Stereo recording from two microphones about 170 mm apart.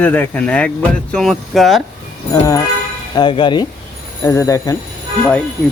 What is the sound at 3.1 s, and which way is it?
Speech, 25° left (ahead or behind).